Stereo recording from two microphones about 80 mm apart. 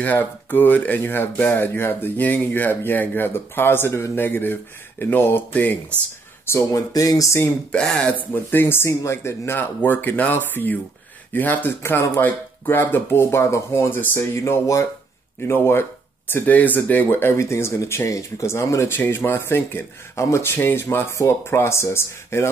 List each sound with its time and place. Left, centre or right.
0.0 s speech: left
6.4 s speech: left
6.9 s speech: left
7.7 s speech: centre
8.2 s speech: left